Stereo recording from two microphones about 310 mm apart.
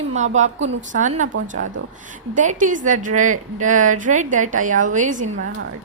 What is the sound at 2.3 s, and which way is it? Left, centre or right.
A woman's voice, right.